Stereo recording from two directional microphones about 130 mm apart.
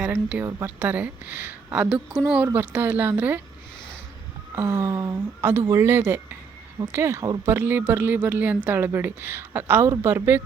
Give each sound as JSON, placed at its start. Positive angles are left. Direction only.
{"t": 0.0, "sound": "a woman's voice", "side_deg": -10}
{"t": 4.5, "sound": "speech", "side_deg": -15}